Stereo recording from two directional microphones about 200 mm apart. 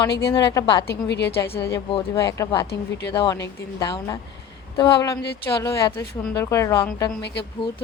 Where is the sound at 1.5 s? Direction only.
15° left (ahead or behind).